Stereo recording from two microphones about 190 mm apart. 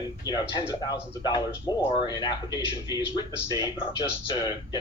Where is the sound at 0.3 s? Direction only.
25° left (ahead or behind).